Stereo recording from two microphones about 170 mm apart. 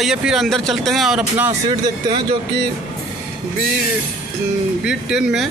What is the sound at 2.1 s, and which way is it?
Speech, 30° right (ahead or behind).